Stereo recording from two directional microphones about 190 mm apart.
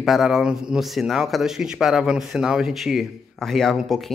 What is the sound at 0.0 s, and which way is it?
A man's voice, centre (ahead or behind).